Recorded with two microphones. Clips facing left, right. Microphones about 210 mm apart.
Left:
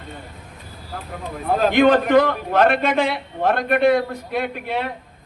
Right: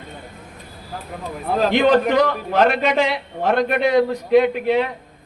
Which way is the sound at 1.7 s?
50° left (ahead or behind).